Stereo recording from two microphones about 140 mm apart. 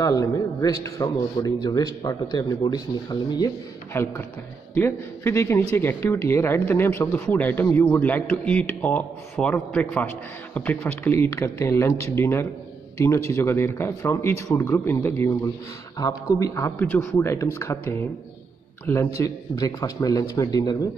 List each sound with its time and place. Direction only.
0.0 s speech: 25° left (ahead or behind)
16.0 s speech: 25° left (ahead or behind)